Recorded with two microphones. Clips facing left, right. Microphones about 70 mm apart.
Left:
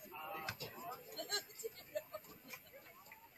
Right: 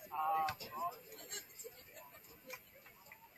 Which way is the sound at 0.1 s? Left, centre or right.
Right.